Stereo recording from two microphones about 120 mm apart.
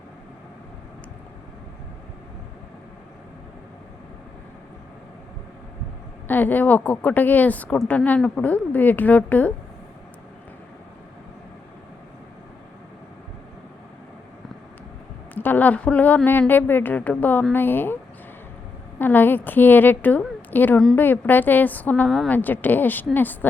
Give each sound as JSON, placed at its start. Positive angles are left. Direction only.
{"t": 6.2, "sound": "a woman's voice", "side_deg": 15}
{"t": 15.4, "sound": "a woman's voice", "side_deg": 15}
{"t": 18.9, "sound": "a woman's voice", "side_deg": 15}